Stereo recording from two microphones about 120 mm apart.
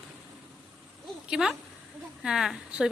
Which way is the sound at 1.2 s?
5° right (ahead or behind).